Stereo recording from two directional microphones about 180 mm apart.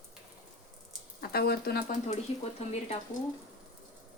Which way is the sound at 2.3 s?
30° left (ahead or behind).